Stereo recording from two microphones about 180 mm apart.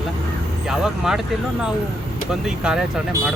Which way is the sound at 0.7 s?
5° right (ahead or behind).